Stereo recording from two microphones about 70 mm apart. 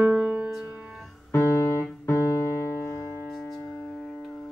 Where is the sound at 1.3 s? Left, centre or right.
Left.